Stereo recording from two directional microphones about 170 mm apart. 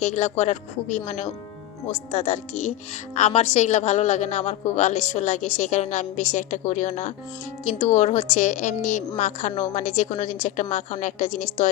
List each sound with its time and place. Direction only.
0.0 s a woman's voice: 45° left (ahead or behind)